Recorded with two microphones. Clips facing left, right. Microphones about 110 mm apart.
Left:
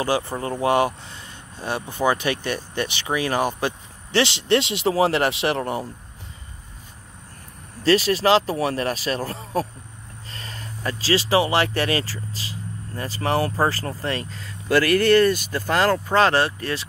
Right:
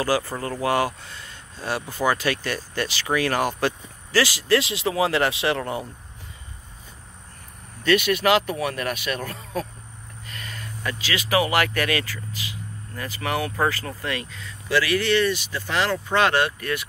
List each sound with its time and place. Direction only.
0.0 s speech: 20° left (ahead or behind)
7.8 s speech: 35° left (ahead or behind)